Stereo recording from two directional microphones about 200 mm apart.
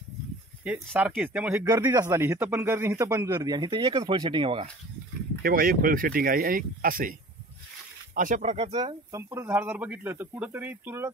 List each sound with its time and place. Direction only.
0.9 s speech: 5° right (ahead or behind); by 4.6 s 25° right (ahead or behind)
5.4 s speech: 45° right (ahead or behind); by 11.1 s 10° right (ahead or behind)